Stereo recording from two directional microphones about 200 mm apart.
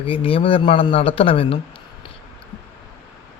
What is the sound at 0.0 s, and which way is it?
Speech, 30° left (ahead or behind).